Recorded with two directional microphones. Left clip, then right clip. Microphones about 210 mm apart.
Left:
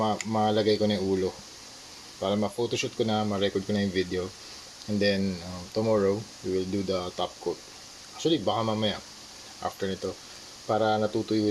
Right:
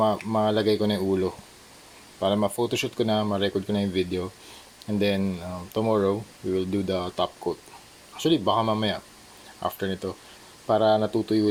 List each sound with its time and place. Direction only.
0.0 s speech: 20° right (ahead or behind)